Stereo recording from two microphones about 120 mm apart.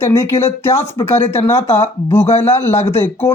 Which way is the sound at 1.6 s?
65° left (ahead or behind).